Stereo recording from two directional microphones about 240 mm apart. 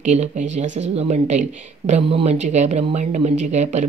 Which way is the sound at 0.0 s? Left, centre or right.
Right.